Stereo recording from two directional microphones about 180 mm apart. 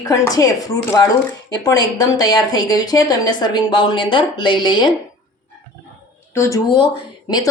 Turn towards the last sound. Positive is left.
turn(degrees=20)  # may be behind; listen again after turning